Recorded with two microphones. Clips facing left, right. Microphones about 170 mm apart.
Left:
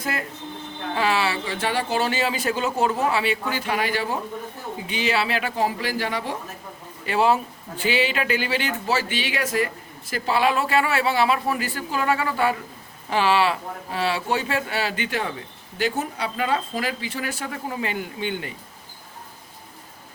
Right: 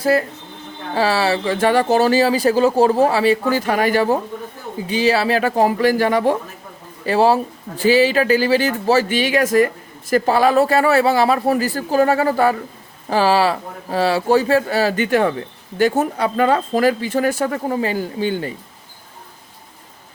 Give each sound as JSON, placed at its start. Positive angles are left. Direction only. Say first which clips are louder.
{"t": 0.0, "sound": "speech", "louder": "right 12 dB", "side_deg": -35}
{"t": 7.0, "sound": "speech", "louder": "right 5 dB", "side_deg": -35}